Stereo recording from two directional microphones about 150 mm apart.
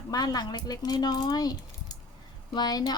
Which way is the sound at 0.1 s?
25° left (ahead or behind).